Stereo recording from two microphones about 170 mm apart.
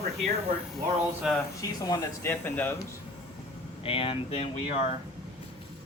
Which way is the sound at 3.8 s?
35° left (ahead or behind).